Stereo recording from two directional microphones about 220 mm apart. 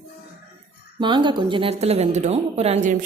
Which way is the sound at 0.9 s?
20° right (ahead or behind).